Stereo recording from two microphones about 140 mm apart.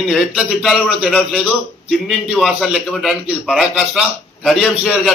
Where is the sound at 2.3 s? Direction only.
Centre (ahead or behind).